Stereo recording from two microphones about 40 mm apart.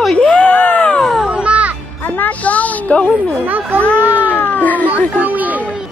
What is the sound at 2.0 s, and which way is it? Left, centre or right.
Music, left.